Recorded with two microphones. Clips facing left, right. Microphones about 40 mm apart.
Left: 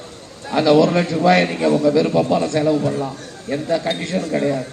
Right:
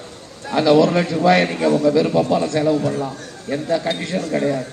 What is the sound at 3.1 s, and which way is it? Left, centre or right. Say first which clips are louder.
A man's voice: even; centre.